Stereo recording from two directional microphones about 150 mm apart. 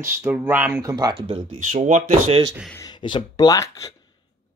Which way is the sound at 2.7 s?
30° left (ahead or behind).